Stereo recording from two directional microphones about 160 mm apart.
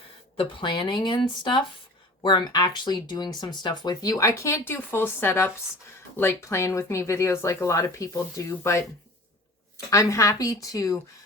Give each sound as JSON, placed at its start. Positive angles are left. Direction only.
{"t": 0.3, "sound": "speech", "side_deg": 30}
{"t": 9.9, "sound": "speech", "side_deg": 20}